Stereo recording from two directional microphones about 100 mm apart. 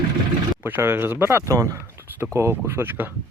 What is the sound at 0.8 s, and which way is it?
Speech, 25° right (ahead or behind).